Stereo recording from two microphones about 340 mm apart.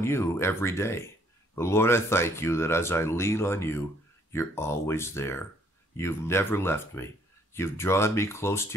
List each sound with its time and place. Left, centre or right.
0.0 s speech: centre